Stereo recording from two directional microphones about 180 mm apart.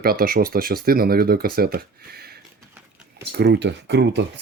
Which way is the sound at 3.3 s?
70° right (ahead or behind).